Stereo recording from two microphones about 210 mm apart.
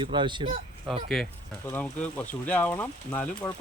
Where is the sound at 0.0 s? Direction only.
25° right (ahead or behind).